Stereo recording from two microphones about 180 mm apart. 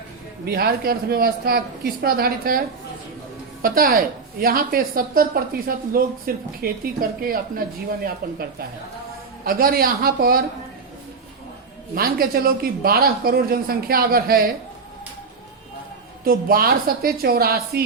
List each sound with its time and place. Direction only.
0.4 s speech: 60° right (ahead or behind)
3.6 s a woman's voice: 50° right (ahead or behind)
11.9 s speech: 55° right (ahead or behind)
16.2 s speech: 55° right (ahead or behind)